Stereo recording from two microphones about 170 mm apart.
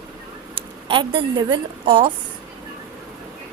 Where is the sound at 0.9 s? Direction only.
30° right (ahead or behind).